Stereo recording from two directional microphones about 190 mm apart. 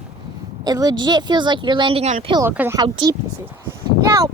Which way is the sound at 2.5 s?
10° right (ahead or behind).